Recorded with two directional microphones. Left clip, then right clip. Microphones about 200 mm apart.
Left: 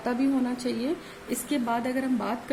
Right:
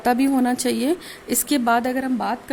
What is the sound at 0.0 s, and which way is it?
A woman's voice, 55° right (ahead or behind).